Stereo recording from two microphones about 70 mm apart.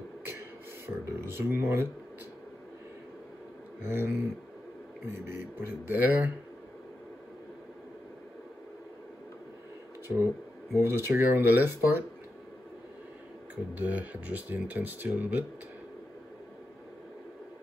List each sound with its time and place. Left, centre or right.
0.8 s speech: right
3.8 s speech: right
10.1 s speech: right
13.7 s speech: right